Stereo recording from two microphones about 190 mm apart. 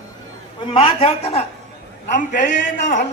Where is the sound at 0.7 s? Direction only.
30° left (ahead or behind).